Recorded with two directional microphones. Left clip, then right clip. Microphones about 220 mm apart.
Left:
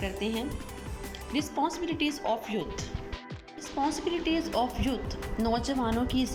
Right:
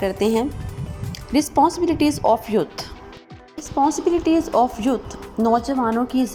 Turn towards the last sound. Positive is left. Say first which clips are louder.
# right 9 dB
turn(degrees=-10)  # may be behind; listen again after turning